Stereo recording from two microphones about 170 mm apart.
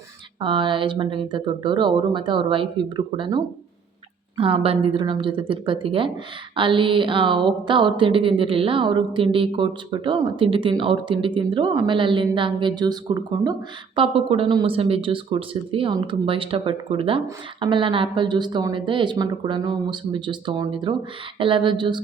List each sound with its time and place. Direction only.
0.3 s a woman's voice: 30° right (ahead or behind)